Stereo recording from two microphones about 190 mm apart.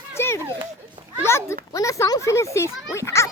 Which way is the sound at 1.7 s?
15° left (ahead or behind).